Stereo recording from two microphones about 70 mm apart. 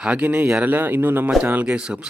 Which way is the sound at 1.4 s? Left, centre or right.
Centre.